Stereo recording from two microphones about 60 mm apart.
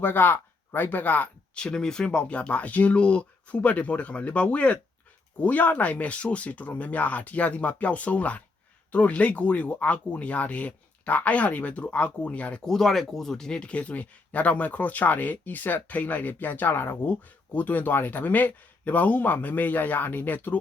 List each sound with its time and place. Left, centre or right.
0.0 s speech: left
1.5 s speech: centre
12.6 s speech: centre; by 20.6 s left